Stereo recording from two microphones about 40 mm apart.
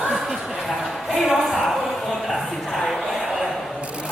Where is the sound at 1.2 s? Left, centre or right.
Centre.